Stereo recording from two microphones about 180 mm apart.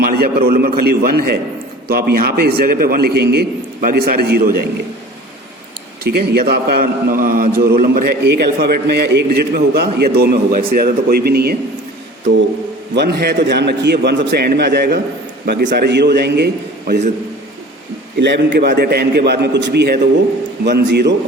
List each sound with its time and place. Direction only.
0.0 s a man's voice: 55° right (ahead or behind)
6.1 s a man's voice: 55° right (ahead or behind)
12.9 s a man's voice: 65° right (ahead or behind)
18.6 s a man's voice: 60° right (ahead or behind)